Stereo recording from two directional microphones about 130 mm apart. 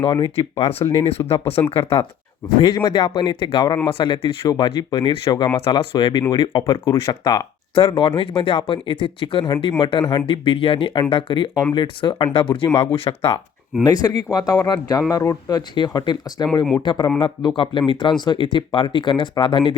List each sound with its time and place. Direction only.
0.0 s speech: 45° left (ahead or behind)
13.8 s speech: 30° left (ahead or behind)
15.1 s speech: 20° left (ahead or behind)
15.4 s speech: 35° left (ahead or behind)